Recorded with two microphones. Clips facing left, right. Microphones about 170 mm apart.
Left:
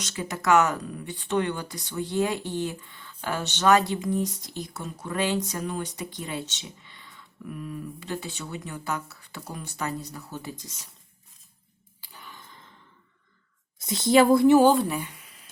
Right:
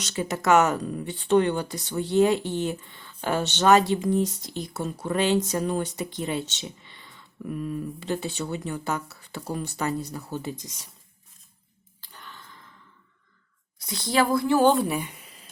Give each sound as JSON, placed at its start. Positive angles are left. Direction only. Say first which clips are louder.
{"t": 0.0, "sound": "speech", "louder": "right 3 dB", "side_deg": -30}
{"t": 10.6, "sound": "speech", "louder": "right 2 dB", "side_deg": -15}
{"t": 11.9, "sound": "a sound", "louder": "even", "side_deg": 10}
{"t": 13.8, "sound": "a woman's voice", "louder": "left 5 dB", "side_deg": 20}
{"t": 14.6, "sound": "speech", "louder": "left 1 dB", "side_deg": 5}
{"t": 14.8, "sound": "speech", "louder": "right 2 dB", "side_deg": -10}